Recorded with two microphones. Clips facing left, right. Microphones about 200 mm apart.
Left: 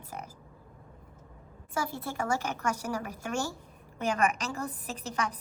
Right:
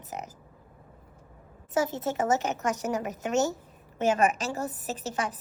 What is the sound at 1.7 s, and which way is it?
A woman's voice, 20° right (ahead or behind).